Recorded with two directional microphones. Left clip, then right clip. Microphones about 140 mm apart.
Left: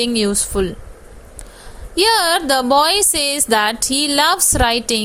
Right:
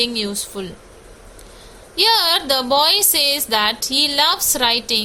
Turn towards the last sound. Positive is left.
turn(degrees=55)  # may be behind; listen again after turning